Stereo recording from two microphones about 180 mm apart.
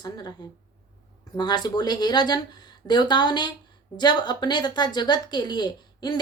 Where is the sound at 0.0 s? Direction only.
25° left (ahead or behind).